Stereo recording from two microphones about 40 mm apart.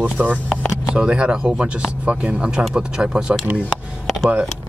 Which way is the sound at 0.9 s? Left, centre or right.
Right.